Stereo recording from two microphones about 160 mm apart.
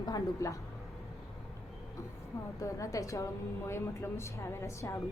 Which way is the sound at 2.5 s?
20° left (ahead or behind).